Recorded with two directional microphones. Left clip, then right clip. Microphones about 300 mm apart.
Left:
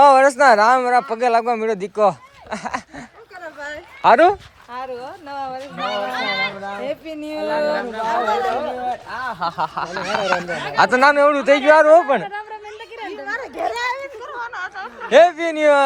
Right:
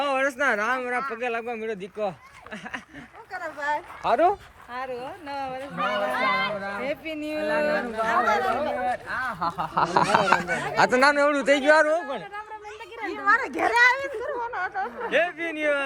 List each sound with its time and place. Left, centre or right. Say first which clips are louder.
0.0 s speech: left 13 dB; centre
4.0 s speech: left 10 dB; left
5.7 s speech: left 2 dB; centre
6.7 s speech: left 3 dB; centre
9.7 s speech: right 2 dB; centre
12.2 s a woman's voice: left 8 dB; left
13.4 s a child's voice: right 3 dB; right
14.2 s a sound: left 1 dB; right
15.1 s speech: left 13 dB; left